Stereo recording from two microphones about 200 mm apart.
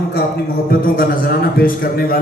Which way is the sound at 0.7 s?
50° left (ahead or behind).